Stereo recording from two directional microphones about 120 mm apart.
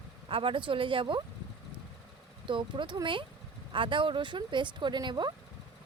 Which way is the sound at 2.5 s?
45° right (ahead or behind).